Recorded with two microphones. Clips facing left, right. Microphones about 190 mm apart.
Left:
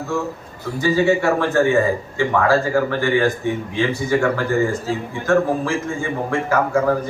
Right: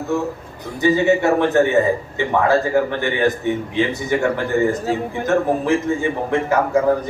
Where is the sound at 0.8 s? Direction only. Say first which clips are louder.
Right 2 dB; 20° right (ahead or behind).